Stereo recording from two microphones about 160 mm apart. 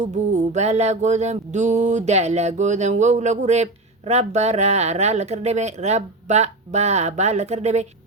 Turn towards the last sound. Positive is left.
turn(degrees=-45)  # may be behind; listen again after turning